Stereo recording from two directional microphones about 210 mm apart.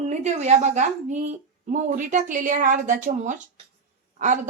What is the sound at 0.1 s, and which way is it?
Speech, 35° right (ahead or behind).